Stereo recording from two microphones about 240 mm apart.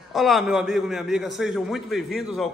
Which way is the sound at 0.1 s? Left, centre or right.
Centre.